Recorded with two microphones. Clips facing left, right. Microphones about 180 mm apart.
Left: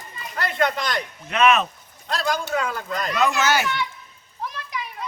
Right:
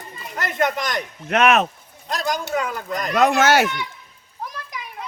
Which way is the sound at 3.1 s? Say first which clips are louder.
Right 5 dB; 55° right (ahead or behind).